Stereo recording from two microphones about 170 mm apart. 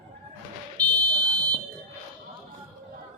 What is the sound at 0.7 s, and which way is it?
Buzzer, 25° right (ahead or behind).